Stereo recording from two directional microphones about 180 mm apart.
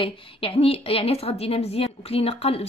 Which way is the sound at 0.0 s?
30° left (ahead or behind).